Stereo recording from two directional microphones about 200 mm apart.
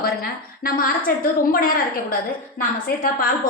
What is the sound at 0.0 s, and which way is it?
A woman's voice, 50° left (ahead or behind).